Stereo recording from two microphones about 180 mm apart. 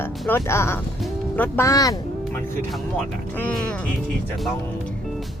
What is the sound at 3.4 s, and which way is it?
Speech, 5° left (ahead or behind).